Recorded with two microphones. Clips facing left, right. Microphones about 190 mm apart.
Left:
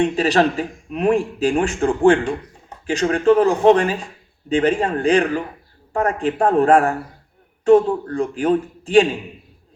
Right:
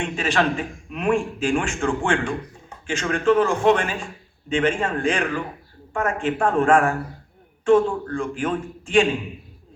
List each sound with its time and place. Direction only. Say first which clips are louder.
0.0 s a man's voice: left 6 dB; 35° left (ahead or behind)